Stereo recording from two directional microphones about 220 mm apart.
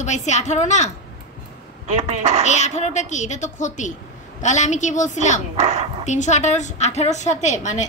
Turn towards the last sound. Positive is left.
turn(degrees=35)  # may be behind; listen again after turning